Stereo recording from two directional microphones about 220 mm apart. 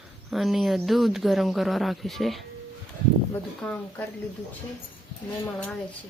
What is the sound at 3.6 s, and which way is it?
Speech, 5° left (ahead or behind).